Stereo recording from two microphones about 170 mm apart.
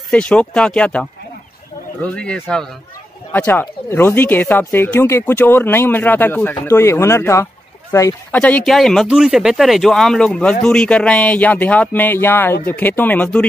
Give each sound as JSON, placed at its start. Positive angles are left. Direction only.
{"t": 0.1, "sound": "speech", "side_deg": 5}